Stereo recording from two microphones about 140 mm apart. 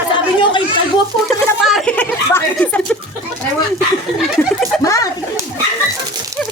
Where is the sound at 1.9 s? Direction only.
10° left (ahead or behind).